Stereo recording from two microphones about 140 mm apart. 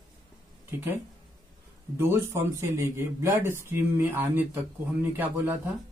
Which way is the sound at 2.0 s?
20° right (ahead or behind).